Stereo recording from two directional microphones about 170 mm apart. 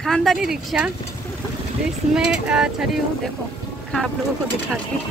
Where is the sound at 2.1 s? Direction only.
5° right (ahead or behind).